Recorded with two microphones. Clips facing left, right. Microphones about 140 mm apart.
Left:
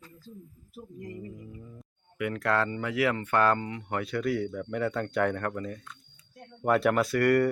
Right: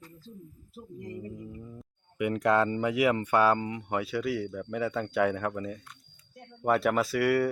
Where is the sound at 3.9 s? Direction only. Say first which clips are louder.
Left 1 dB; 5° right (ahead or behind).